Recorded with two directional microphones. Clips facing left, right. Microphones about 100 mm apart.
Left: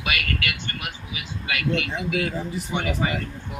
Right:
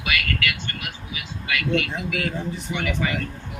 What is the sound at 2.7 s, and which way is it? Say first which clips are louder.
Speech: left 1 dB; 30° left (ahead or behind).